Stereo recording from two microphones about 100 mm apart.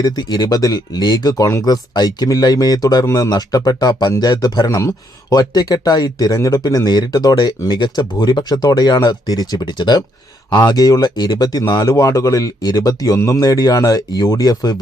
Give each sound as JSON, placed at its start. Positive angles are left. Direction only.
{"t": 0.0, "sound": "speech", "side_deg": 45}